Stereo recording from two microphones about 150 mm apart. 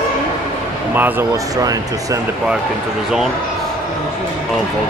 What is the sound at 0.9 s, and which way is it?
Speech, 15° right (ahead or behind).